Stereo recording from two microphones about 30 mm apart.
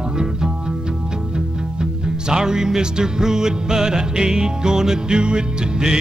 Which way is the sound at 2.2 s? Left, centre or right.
Right.